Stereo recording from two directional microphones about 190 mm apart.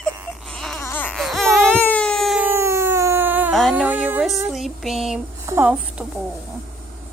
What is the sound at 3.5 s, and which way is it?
Music, centre (ahead or behind).